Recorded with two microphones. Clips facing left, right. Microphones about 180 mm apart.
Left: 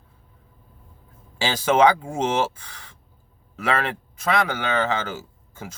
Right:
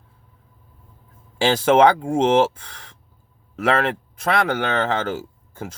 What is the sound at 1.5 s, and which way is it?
Speech, 55° right (ahead or behind).